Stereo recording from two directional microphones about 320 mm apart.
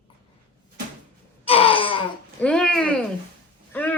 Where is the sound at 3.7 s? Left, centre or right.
Centre.